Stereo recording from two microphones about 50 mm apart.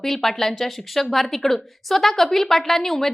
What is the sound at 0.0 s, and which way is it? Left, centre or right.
A woman's voice, centre.